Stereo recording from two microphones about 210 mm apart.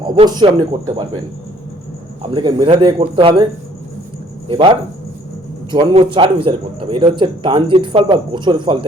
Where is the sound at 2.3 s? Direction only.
25° right (ahead or behind).